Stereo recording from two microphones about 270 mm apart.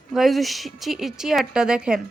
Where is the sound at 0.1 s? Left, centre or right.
Centre.